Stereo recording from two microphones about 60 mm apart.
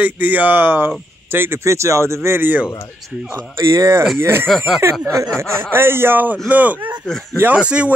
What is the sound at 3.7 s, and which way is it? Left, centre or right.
Speech, right.